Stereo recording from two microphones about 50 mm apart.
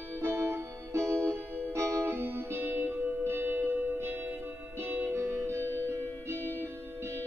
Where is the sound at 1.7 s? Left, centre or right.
Right.